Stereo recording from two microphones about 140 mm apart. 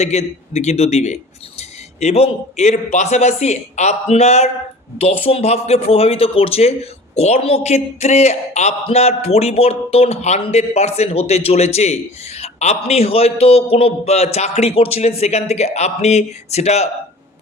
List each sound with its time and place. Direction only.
0.0 s a man's voice: 50° left (ahead or behind)